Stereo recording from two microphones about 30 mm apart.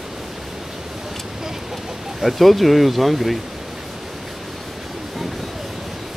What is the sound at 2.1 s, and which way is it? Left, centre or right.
Speech, centre.